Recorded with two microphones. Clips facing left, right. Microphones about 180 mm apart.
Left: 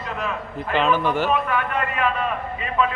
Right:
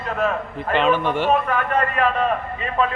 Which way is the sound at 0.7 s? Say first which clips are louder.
Right 1 dB; centre (ahead or behind).